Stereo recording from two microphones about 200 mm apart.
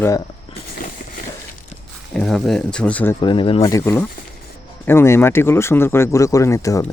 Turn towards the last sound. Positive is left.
turn(degrees=15)  # may be behind; listen again after turning